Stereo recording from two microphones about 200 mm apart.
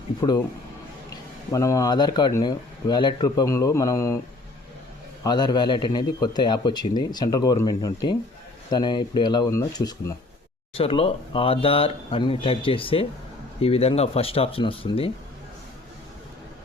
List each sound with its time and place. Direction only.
0.2 s a man's voice: 20° left (ahead or behind)
1.5 s speech: 15° left (ahead or behind)
5.2 s a man's voice: 20° left (ahead or behind)
10.8 s a man's voice: 30° left (ahead or behind)